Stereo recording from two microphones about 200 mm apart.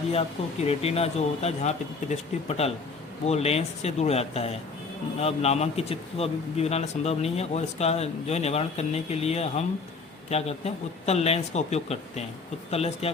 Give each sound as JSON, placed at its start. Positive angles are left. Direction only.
{"t": 0.1, "sound": "a man's voice", "side_deg": 30}